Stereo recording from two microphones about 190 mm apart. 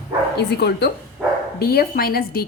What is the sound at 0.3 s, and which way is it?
A woman's voice, 60° left (ahead or behind).